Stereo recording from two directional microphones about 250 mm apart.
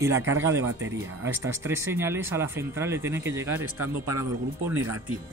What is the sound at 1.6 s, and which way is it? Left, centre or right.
Speech, centre.